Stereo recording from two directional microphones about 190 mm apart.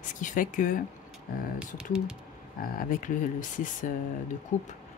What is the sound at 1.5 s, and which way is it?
Speech, 5° right (ahead or behind).